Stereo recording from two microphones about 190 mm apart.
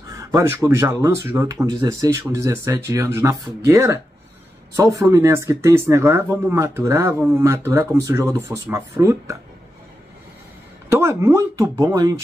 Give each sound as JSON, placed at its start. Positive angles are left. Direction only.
{"t": 0.1, "sound": "speech", "side_deg": -20}
{"t": 10.9, "sound": "speech", "side_deg": -15}